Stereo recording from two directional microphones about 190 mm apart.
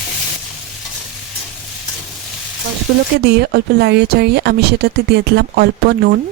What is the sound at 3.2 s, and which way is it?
Speech, 55° right (ahead or behind).